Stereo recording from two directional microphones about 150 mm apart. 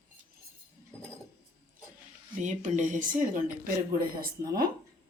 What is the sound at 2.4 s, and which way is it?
Speech, 55° right (ahead or behind).